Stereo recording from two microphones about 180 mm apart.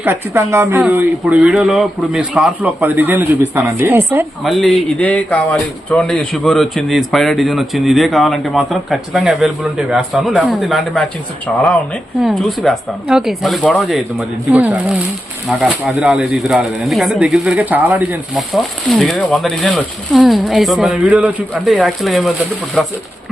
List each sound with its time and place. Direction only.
0.0 s speech: 15° right (ahead or behind)
4.4 s speech: centre (ahead or behind)
12.2 s speech: centre (ahead or behind)